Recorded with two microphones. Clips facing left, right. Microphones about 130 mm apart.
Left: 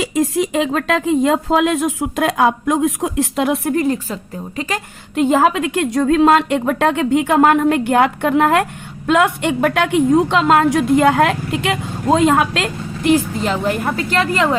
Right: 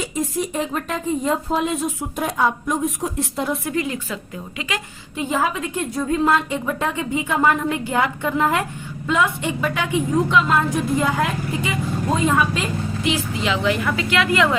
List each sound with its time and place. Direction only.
0.0 s speech: 90° left
3.7 s a woman's voice: 45° left (ahead or behind)
5.1 s a woman's voice: 75° left (ahead or behind); by 14.5 s 35° left (ahead or behind)